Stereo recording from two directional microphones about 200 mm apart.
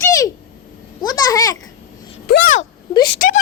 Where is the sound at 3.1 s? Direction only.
45° left (ahead or behind).